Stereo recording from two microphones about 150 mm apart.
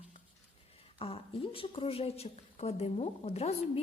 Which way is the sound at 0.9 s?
40° left (ahead or behind).